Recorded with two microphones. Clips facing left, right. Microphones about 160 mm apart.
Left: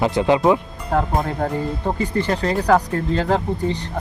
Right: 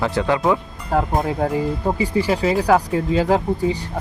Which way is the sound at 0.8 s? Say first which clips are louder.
Right 1 dB; centre (ahead or behind).